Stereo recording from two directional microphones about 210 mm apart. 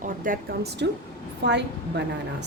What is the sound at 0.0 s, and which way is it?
A woman's voice, 45° right (ahead or behind).